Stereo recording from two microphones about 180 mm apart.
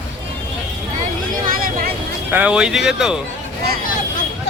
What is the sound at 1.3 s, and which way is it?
Vehicle, 50° right (ahead or behind).